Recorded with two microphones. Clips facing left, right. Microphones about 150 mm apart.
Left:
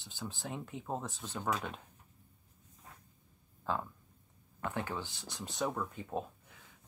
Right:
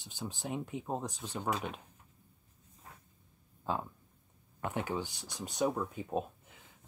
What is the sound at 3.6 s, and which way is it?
Speech, 15° right (ahead or behind).